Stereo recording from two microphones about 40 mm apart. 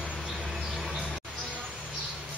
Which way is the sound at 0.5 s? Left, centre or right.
Centre.